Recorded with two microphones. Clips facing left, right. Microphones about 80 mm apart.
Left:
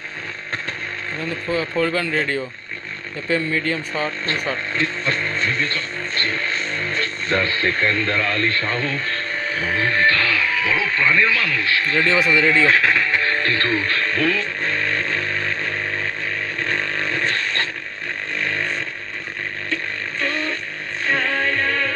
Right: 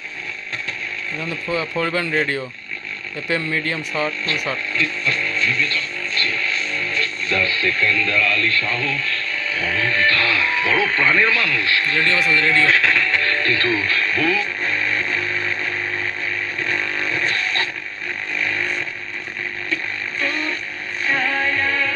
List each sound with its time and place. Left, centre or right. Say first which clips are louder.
1.5 s speech: left 2 dB; centre
4.7 s music: even; left
10.8 s speech: right 1 dB; centre
11.3 s speech: right 1 dB; left
13.4 s music: even; left
16.6 s vehicle: left 1 dB; left
18.3 s vehicle: even; left
20.1 s a sound: even; left
21.1 s music: even; left